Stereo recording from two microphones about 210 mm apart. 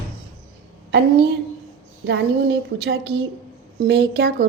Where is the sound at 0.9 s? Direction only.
50° right (ahead or behind).